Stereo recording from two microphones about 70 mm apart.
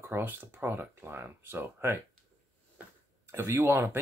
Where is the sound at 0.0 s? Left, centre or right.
Right.